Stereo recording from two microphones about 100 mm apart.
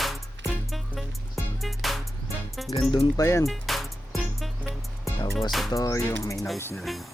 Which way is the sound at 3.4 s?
Centre (ahead or behind).